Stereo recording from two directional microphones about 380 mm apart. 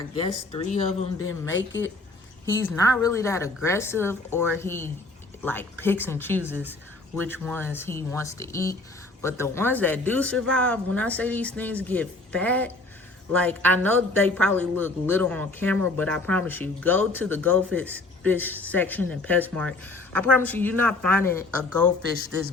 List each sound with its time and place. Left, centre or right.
0.5 s a woman's voice: centre